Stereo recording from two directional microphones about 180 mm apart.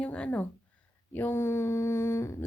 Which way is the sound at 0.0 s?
5° left (ahead or behind).